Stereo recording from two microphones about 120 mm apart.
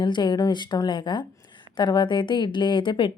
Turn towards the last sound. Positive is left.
turn(degrees=45)  # may be behind; listen again after turning